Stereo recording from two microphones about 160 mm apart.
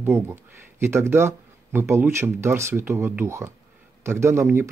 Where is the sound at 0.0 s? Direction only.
15° right (ahead or behind).